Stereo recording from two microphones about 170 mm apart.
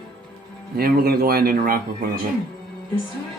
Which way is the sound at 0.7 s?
60° right (ahead or behind).